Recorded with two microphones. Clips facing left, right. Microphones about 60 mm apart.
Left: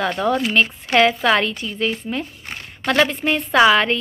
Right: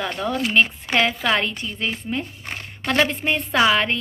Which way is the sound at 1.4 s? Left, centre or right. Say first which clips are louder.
Left 4 dB; right.